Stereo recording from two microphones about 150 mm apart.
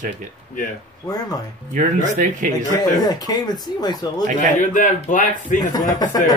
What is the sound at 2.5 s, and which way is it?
Speech, 25° left (ahead or behind).